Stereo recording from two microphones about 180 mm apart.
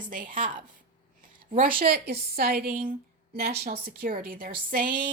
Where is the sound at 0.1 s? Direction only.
50° right (ahead or behind).